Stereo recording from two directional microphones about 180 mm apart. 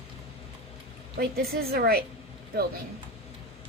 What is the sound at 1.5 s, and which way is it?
Speech, 60° right (ahead or behind).